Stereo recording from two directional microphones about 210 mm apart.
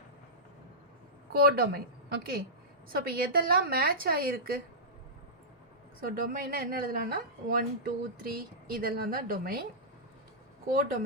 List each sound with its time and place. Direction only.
1.3 s a woman's voice: 45° right (ahead or behind)
6.0 s a woman's voice: 45° right (ahead or behind)